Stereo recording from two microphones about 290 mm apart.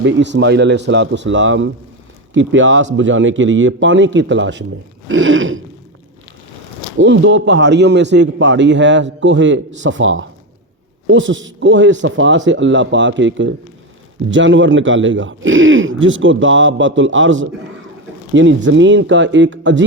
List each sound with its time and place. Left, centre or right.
0.0 s a man's voice: right
7.0 s a man's voice: right